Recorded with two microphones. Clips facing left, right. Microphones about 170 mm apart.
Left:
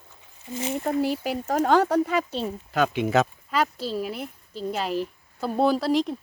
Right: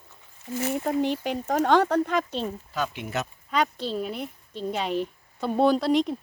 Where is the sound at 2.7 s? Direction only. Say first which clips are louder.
Left 8 dB; 80° left.